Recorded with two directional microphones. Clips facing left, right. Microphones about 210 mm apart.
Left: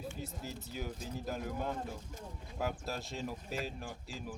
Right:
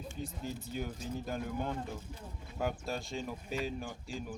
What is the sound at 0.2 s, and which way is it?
Speech, 5° left (ahead or behind).